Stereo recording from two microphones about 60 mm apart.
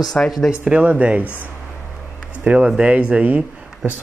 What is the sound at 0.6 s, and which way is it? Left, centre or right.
Speech, right.